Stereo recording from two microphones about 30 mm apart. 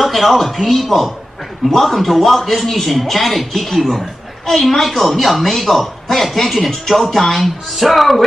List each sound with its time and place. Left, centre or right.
0.0 s speech: centre